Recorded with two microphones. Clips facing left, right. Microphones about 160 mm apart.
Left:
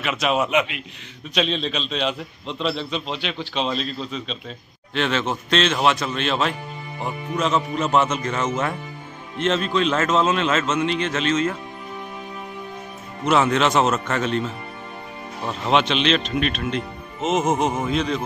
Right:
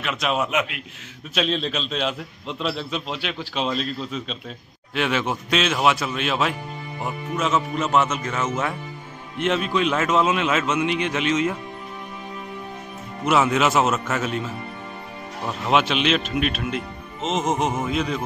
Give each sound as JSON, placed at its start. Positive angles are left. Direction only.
{"t": 0.0, "sound": "a man's voice", "side_deg": 0}
{"t": 13.2, "sound": "a man's voice", "side_deg": -5}
{"t": 15.6, "sound": "a man's voice", "side_deg": -5}
{"t": 17.2, "sound": "a man's voice", "side_deg": 5}